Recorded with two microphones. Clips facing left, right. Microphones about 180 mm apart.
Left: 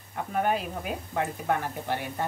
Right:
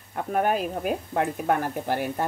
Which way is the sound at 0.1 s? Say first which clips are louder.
Right 3 dB; 50° right (ahead or behind).